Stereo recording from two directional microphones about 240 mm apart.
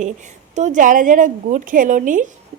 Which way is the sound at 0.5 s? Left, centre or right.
Right.